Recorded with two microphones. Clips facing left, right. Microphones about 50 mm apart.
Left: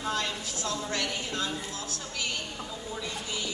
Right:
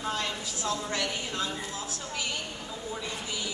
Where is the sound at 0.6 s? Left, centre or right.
Centre.